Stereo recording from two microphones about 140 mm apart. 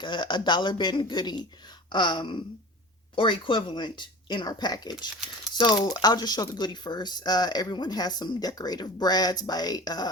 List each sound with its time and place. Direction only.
0.0 s speech: 35° left (ahead or behind)